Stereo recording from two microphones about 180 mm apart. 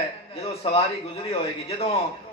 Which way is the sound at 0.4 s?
35° left (ahead or behind).